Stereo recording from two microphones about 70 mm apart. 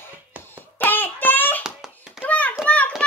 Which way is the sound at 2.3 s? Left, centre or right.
Left.